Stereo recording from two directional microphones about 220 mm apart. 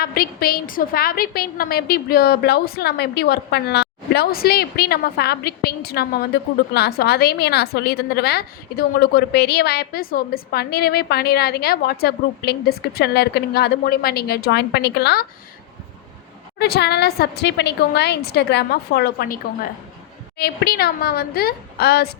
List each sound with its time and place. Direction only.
0.0 s a woman's voice: 45° left (ahead or behind)
16.6 s a woman's voice: 45° left (ahead or behind)
20.4 s a woman's voice: 45° left (ahead or behind)